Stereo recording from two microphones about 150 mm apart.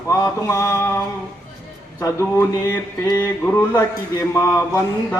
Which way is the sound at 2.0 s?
20° left (ahead or behind).